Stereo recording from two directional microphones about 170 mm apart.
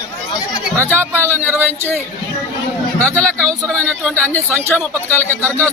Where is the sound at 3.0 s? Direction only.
10° left (ahead or behind).